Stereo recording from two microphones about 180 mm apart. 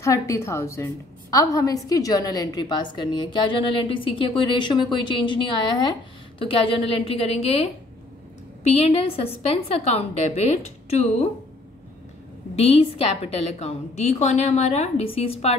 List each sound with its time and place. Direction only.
0.0 s a woman's voice: 15° left (ahead or behind); by 11.2 s 35° left (ahead or behind)
12.5 s a woman's voice: 35° left (ahead or behind)